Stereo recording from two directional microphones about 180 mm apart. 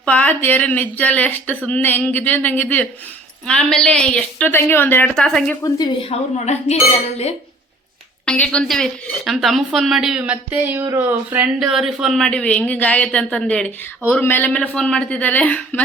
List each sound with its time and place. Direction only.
0.0 s speech: 10° left (ahead or behind)
5.6 s a woman's voice: 20° left (ahead or behind)
6.0 s a woman's voice: 35° left (ahead or behind)
8.2 s speech: 5° left (ahead or behind)